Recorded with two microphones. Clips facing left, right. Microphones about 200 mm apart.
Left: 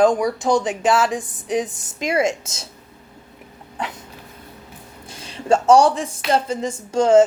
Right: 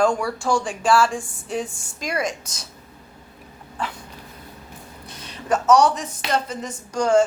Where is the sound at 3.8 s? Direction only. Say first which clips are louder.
Left 1 dB; 20° left (ahead or behind).